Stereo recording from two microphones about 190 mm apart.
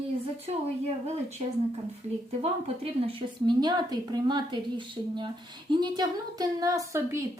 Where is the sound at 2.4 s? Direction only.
30° right (ahead or behind).